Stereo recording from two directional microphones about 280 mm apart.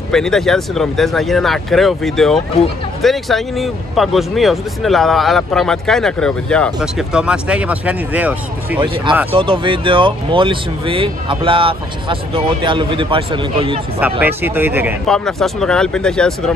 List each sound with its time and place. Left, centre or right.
0.1 s speech: centre
8.7 s speech: centre
13.9 s speech: centre